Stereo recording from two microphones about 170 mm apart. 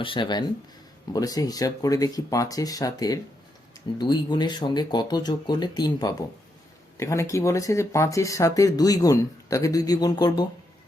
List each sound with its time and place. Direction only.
0.0 s speech: 30° left (ahead or behind)